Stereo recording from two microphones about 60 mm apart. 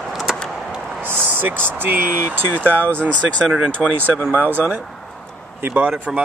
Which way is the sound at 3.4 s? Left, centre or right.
Centre.